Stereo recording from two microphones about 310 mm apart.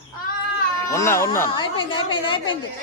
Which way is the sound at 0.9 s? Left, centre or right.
Centre.